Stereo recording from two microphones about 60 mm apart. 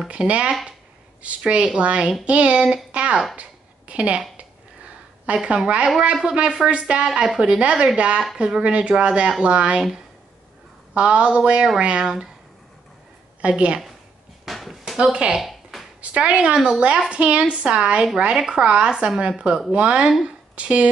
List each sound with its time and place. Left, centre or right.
0.1 s a woman's voice: centre
3.3 s a sound: right
6.2 s a woman's voice: centre
11.0 s a woman's voice: centre
13.4 s a woman's voice: centre
14.4 s a sound: centre
16.0 s a woman's voice: centre
20.1 s a woman's voice: centre
20.5 s a woman's voice: centre